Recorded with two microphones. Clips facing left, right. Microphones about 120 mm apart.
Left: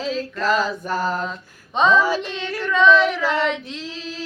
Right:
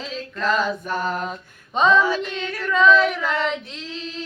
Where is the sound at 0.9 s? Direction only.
35° left (ahead or behind).